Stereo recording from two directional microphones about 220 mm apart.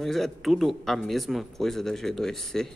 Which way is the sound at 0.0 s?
Centre (ahead or behind).